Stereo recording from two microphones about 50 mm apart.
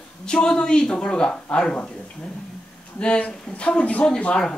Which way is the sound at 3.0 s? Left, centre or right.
Left.